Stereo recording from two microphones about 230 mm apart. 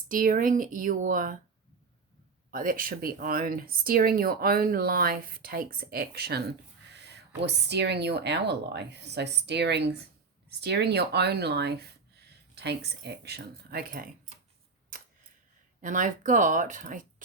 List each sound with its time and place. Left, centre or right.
0.1 s speech: right
2.5 s speech: right
15.8 s speech: right